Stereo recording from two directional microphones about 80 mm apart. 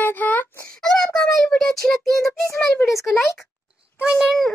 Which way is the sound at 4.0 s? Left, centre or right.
Centre.